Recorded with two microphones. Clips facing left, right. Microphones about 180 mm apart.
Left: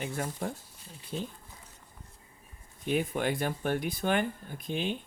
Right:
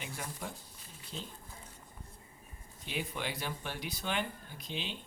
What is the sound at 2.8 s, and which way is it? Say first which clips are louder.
Speech: left 9 dB; 50° left (ahead or behind).